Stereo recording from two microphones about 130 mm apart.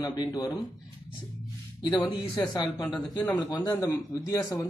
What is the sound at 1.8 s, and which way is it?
Speech, 35° left (ahead or behind).